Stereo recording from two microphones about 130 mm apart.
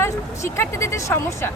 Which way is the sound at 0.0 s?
20° left (ahead or behind).